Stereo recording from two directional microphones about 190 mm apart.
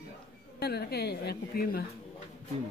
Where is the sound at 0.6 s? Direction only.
55° left (ahead or behind).